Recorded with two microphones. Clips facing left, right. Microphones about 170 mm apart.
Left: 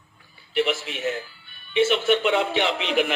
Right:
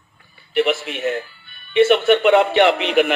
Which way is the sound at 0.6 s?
60° right (ahead or behind).